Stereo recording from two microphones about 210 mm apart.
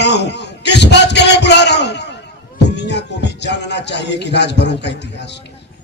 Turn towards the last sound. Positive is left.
turn(degrees=55)  # may be behind; listen again after turning